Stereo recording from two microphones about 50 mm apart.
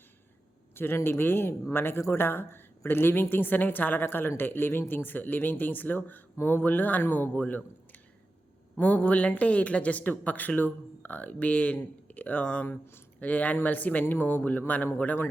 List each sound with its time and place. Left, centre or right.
0.8 s a woman's voice: left